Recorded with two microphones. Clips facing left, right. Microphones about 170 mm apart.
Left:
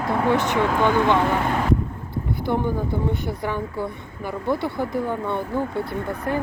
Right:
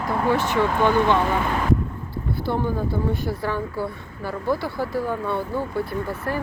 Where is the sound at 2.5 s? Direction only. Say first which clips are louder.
Left 1 dB; 15° left (ahead or behind).